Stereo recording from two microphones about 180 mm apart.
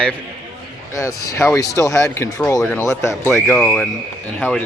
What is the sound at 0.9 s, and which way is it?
Speech, 20° left (ahead or behind).